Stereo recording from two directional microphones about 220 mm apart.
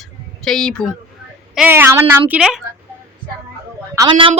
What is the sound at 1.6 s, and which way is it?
A woman's voice, 10° right (ahead or behind).